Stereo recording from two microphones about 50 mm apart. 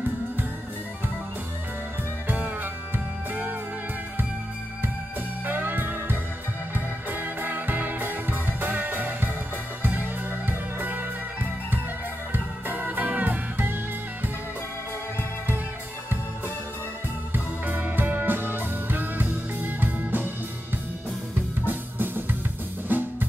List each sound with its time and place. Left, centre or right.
2.2 s music: right
5.4 s music: right
12.6 s music: right
17.3 s music: right
21.6 s music: right
22.9 s drum kit: right